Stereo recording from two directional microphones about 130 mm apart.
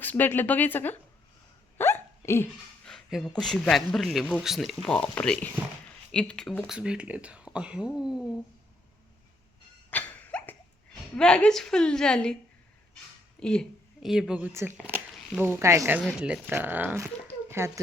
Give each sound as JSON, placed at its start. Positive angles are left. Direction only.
{"t": 0.0, "sound": "speech", "side_deg": 15}
{"t": 1.8, "sound": "hiccup", "side_deg": 20}
{"t": 2.8, "sound": "a man's voice", "side_deg": 0}
{"t": 6.7, "sound": "speech", "side_deg": -5}
{"t": 9.9, "sound": "a sound", "side_deg": 10}
{"t": 11.2, "sound": "a man's voice", "side_deg": 5}
{"t": 13.4, "sound": "speech", "side_deg": 5}
{"t": 14.1, "sound": "a man's voice", "side_deg": -5}
{"t": 15.4, "sound": "speech", "side_deg": -20}
{"t": 16.0, "sound": "speech", "side_deg": -5}